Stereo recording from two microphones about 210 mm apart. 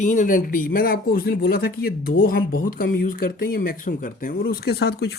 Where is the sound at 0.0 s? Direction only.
35° left (ahead or behind).